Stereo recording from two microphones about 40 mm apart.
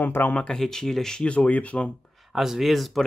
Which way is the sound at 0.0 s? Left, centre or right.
Left.